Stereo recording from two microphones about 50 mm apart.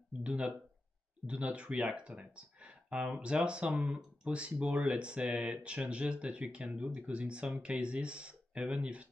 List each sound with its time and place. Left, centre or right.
1.2 s speech: right